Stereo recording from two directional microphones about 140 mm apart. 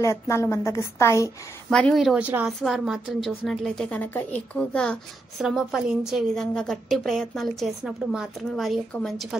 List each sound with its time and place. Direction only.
0.0 s a woman's voice: 20° left (ahead or behind)
1.7 s a woman's voice: 5° left (ahead or behind)
2.2 s a woman's voice: 10° right (ahead or behind)
2.6 s a woman's voice: centre (ahead or behind)
5.4 s a woman's voice: 5° right (ahead or behind)